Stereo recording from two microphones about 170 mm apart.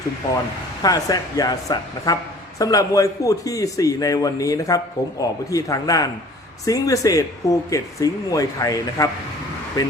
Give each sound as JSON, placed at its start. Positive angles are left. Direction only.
{"t": 0.8, "sound": "speech", "side_deg": 20}